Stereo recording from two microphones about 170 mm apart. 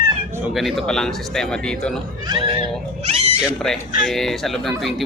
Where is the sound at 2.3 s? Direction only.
30° right (ahead or behind).